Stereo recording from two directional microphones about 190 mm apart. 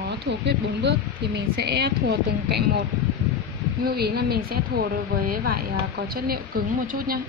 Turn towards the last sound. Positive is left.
turn(degrees=-50)  # may be behind; listen again after turning